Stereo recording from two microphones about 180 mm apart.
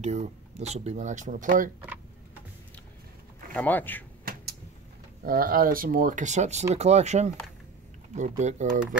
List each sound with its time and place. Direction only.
0.0 s speech: 40° right (ahead or behind)
3.5 s speech: 10° left (ahead or behind)
4.2 s a sound: 55° right (ahead or behind)
5.2 s speech: 55° right (ahead or behind)